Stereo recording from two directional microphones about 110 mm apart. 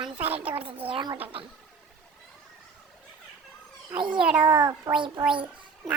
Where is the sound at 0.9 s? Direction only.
50° right (ahead or behind).